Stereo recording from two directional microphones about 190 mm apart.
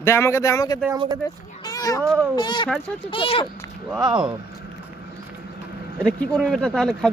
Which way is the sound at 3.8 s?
20° right (ahead or behind).